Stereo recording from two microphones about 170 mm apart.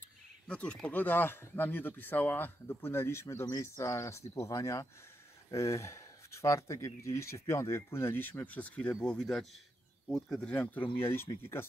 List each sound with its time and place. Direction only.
0.5 s speech: 5° left (ahead or behind)